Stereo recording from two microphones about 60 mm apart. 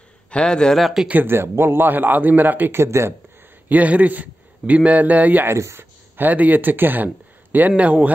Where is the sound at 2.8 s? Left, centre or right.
Right.